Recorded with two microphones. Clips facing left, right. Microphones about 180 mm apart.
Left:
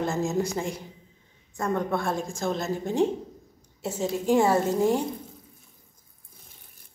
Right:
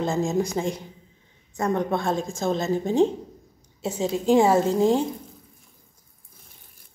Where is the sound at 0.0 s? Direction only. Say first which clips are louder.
Right 3 dB; 15° right (ahead or behind).